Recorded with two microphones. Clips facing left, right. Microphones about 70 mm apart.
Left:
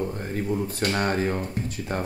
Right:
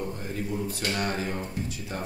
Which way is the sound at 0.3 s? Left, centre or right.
Left.